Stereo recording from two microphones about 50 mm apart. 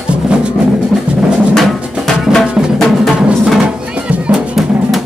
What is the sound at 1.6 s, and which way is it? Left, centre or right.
Drum, centre.